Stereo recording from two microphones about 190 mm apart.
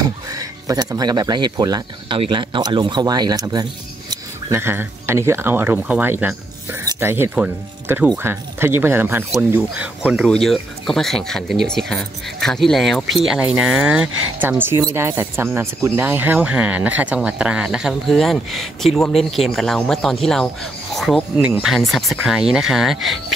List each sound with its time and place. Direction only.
0.3 s speech: 20° right (ahead or behind); by 23.1 s centre (ahead or behind)